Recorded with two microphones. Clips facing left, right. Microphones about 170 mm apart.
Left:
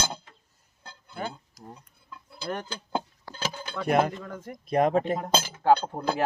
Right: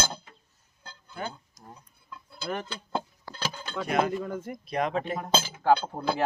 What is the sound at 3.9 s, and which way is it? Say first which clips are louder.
Speech: left 3 dB; 50° left (ahead or behind).